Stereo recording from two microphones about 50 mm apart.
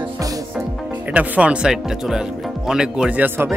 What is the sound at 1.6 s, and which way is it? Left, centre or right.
Speech, centre.